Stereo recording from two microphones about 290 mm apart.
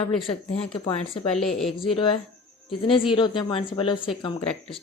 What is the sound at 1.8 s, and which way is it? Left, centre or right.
Speech, centre.